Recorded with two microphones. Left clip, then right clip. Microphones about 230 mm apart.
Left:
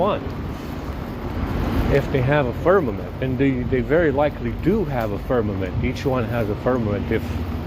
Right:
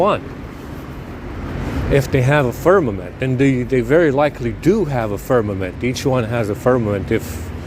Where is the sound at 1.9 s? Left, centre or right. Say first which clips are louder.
Right 4 dB; right.